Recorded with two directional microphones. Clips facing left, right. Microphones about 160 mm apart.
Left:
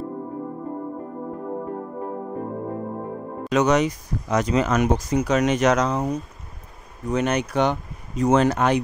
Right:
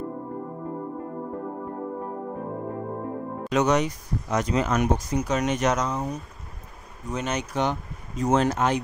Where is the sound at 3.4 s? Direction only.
90° left.